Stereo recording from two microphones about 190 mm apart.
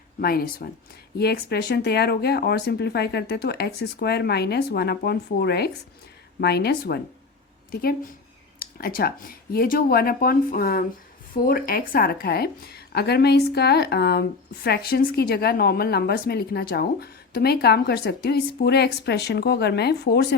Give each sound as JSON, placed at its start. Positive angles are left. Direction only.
{"t": 0.2, "sound": "a woman's voice", "side_deg": 50}